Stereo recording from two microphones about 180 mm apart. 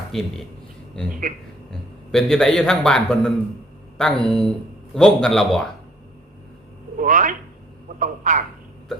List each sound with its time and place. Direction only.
0.1 s a man's voice: centre (ahead or behind)
2.1 s a man's voice: 5° left (ahead or behind)
7.0 s speech: 45° right (ahead or behind)